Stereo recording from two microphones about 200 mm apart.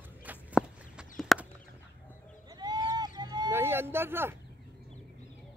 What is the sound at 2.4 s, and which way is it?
Fowl, 20° right (ahead or behind).